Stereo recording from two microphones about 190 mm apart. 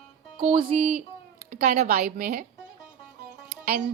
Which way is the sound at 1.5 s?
50° right (ahead or behind).